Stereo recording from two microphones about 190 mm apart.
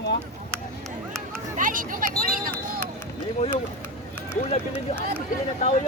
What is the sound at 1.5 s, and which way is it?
Speech, 45° right (ahead or behind).